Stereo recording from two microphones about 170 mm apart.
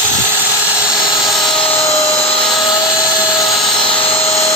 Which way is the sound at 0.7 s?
5° right (ahead or behind).